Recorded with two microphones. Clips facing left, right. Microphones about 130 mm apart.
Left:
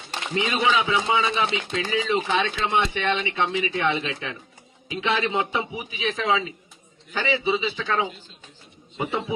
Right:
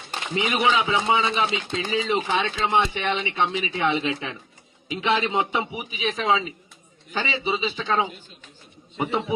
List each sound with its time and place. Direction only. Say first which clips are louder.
0.3 s a man's voice: even; 15° right (ahead or behind)